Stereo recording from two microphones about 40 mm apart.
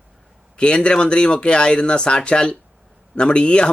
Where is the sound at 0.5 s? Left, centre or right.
Left.